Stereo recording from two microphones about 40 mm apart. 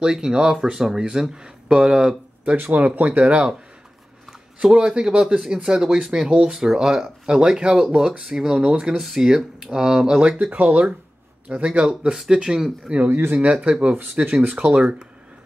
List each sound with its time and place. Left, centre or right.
0.0 s speech: centre
2.5 s speech: right
2.8 s speech: right
4.6 s speech: centre
8.6 s speech: right
9.0 s speech: centre
10.5 s speech: right
11.5 s speech: right
12.4 s speech: centre
12.9 s speech: right